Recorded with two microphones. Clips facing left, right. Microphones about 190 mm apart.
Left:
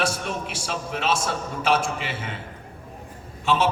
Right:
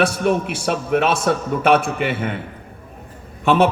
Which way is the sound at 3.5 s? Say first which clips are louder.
Right 7 dB; 60° right (ahead or behind).